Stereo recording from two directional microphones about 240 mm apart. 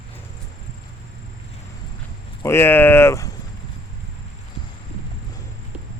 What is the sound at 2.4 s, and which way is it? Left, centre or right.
Speech, centre.